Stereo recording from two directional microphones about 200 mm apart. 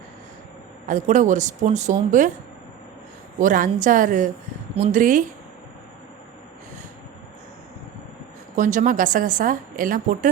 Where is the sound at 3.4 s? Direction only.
40° right (ahead or behind).